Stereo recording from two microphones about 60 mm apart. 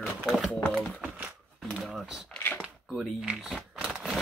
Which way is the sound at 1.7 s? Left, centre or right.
Centre.